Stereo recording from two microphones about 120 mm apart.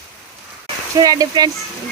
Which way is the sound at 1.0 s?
30° right (ahead or behind).